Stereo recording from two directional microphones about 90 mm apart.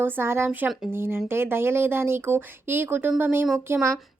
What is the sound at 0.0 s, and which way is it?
A woman's voice, 25° right (ahead or behind).